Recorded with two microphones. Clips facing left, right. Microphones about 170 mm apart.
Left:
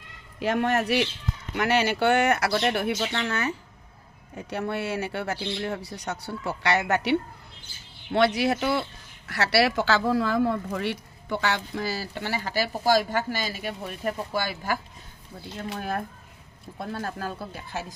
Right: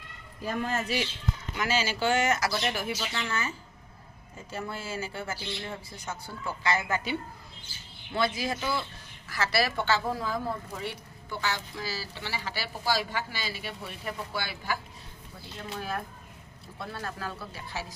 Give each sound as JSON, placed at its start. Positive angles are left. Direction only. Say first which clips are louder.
{"t": 0.4, "sound": "speech", "louder": "left 7 dB", "side_deg": 80}
{"t": 16.7, "sound": "speech", "louder": "left 5 dB", "side_deg": 45}